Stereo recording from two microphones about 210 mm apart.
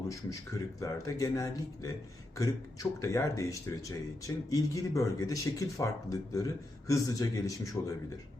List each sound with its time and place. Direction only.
0.1 s speech: 15° left (ahead or behind)